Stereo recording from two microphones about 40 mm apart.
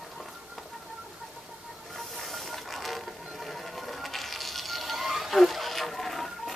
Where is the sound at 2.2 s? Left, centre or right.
Centre.